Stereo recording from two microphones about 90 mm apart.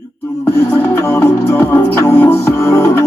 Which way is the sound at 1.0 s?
25° left (ahead or behind).